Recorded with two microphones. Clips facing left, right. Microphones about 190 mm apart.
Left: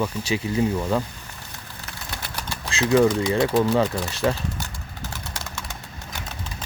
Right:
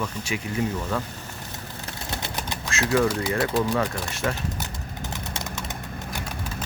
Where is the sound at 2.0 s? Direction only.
20° right (ahead or behind).